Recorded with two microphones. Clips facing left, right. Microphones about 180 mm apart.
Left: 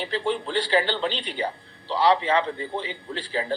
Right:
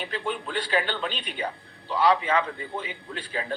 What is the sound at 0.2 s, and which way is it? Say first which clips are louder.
Speech: left 5 dB; 25° left (ahead or behind).